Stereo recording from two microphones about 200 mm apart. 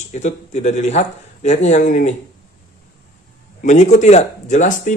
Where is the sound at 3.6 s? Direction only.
35° left (ahead or behind).